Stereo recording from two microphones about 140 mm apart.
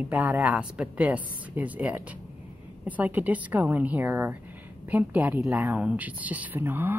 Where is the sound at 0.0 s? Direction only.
10° right (ahead or behind).